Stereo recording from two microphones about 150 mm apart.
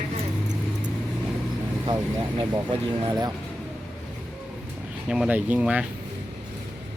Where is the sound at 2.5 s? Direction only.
30° right (ahead or behind).